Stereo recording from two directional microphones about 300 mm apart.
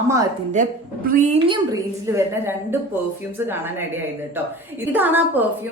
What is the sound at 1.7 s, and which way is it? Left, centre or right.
A woman's voice, centre.